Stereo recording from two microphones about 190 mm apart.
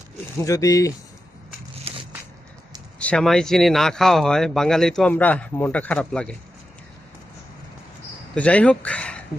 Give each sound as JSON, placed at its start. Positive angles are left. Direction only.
{"t": 0.3, "sound": "speech", "side_deg": 15}
{"t": 3.0, "sound": "speech", "side_deg": 5}
{"t": 8.4, "sound": "speech", "side_deg": 5}